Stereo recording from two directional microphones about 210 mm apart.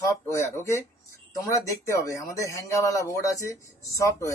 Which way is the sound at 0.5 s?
10° left (ahead or behind).